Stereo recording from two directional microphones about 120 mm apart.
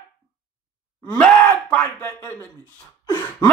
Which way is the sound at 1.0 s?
10° left (ahead or behind).